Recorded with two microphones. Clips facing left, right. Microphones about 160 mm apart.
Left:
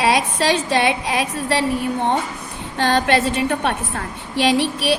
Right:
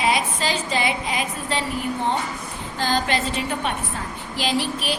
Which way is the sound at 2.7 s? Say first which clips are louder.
Left 6 dB; 65° left (ahead or behind).